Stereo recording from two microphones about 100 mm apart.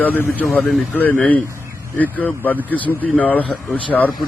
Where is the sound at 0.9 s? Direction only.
20° left (ahead or behind).